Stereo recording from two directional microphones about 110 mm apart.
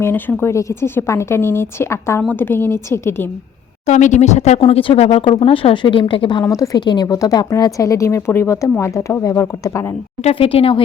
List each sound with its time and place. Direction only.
0.0 s speech: 20° left (ahead or behind)
3.8 s speech: 90° left
4.6 s a woman's voice: 55° left (ahead or behind)
6.4 s a woman's voice: 30° left (ahead or behind)
10.2 s speech: 55° left (ahead or behind)